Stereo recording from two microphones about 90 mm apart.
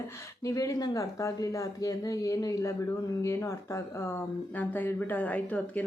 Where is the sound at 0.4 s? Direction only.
40° left (ahead or behind).